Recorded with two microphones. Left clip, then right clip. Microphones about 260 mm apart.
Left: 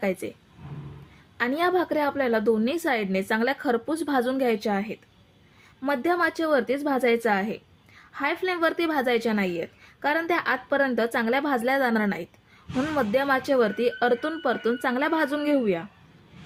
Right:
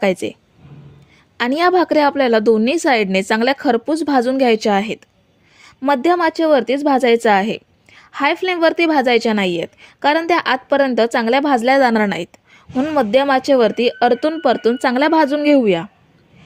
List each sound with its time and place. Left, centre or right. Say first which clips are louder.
0.0 s a woman's voice: right 11 dB; right
1.4 s a woman's voice: right 9 dB; right